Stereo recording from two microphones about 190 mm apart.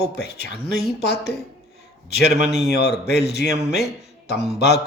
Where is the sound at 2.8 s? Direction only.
60° left (ahead or behind).